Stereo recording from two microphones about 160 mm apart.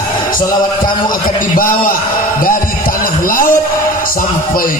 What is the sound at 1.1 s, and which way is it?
Speech, 60° left (ahead or behind).